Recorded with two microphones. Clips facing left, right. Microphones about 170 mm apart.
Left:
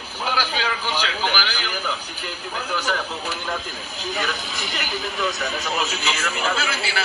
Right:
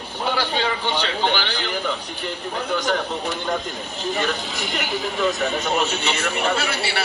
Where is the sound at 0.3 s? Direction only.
25° right (ahead or behind).